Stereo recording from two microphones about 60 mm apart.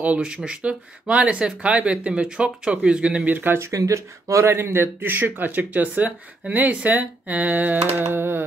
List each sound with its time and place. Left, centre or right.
0.0 s speech: centre
3.5 s speech: right